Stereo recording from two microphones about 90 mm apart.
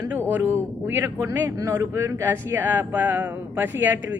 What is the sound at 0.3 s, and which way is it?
Speech, 20° right (ahead or behind).